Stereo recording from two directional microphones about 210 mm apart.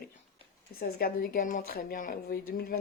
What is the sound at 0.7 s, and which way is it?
A woman's voice, 45° left (ahead or behind).